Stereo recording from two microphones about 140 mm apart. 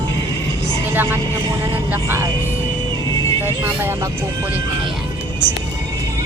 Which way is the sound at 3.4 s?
15° right (ahead or behind).